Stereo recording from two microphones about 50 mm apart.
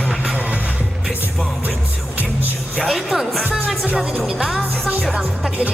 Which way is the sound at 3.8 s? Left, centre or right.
Right.